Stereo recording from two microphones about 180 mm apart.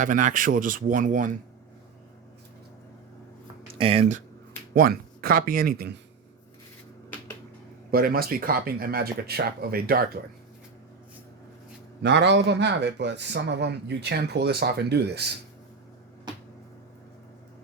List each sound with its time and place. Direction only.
0.0 s speech: 45° right (ahead or behind)
3.8 s speech: 30° right (ahead or behind)
4.7 s speech: 55° right (ahead or behind)
7.9 s speech: 55° right (ahead or behind)
12.0 s a man's voice: 70° right (ahead or behind)